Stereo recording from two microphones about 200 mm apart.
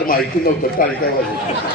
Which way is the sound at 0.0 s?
45° left (ahead or behind).